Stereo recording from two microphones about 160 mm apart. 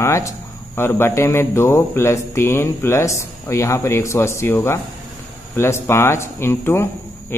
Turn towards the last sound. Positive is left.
turn(degrees=15)  # may be behind; listen again after turning